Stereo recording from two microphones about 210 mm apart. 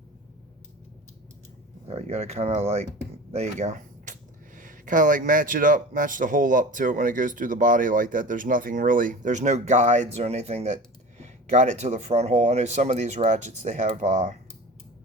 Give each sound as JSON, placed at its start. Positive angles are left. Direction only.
{"t": 1.9, "sound": "speech", "side_deg": -30}